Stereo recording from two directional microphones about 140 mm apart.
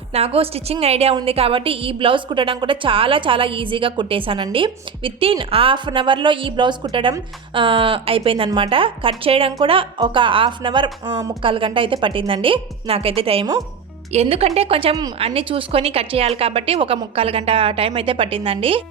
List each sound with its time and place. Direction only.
0.1 s a woman's voice: 45° right (ahead or behind)